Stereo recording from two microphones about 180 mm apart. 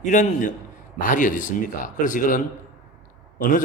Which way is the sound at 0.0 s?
45° left (ahead or behind).